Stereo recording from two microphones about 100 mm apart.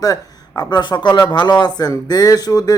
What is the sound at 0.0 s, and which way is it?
Speech, 40° left (ahead or behind).